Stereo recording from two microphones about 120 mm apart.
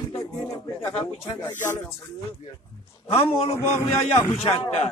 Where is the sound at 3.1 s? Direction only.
55° left (ahead or behind).